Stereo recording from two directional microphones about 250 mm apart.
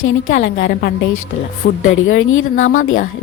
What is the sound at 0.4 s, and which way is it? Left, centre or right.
Speech, left.